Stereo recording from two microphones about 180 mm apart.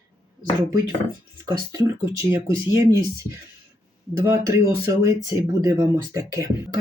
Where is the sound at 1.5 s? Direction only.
15° right (ahead or behind).